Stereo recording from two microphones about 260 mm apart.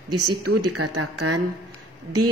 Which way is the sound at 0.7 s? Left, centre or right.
Right.